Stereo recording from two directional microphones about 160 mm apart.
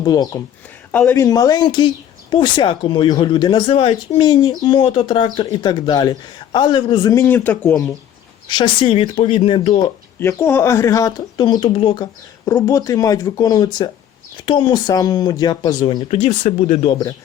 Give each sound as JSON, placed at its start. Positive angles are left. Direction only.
{"t": 0.0, "sound": "speech", "side_deg": 25}
{"t": 0.9, "sound": "speech", "side_deg": 10}
{"t": 1.1, "sound": "speech", "side_deg": 25}
{"t": 8.4, "sound": "speech", "side_deg": 30}
{"t": 9.7, "sound": "speech", "side_deg": 20}
{"t": 12.5, "sound": "speech", "side_deg": 20}